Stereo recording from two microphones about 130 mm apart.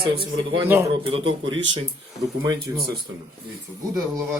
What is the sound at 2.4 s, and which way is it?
Speech, 30° right (ahead or behind).